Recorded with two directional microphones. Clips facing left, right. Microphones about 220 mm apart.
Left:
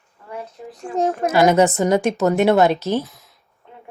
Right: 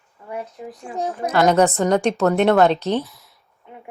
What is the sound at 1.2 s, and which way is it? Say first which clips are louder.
Speech: left 1 dB; 10° left (ahead or behind).